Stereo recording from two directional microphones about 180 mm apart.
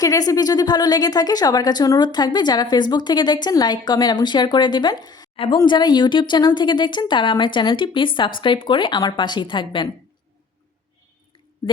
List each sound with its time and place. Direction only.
0.0 s speech: 20° left (ahead or behind)